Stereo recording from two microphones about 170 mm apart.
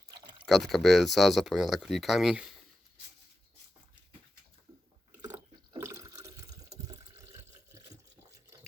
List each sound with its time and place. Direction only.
0.4 s speech: centre (ahead or behind)
5.1 s water: 15° right (ahead or behind)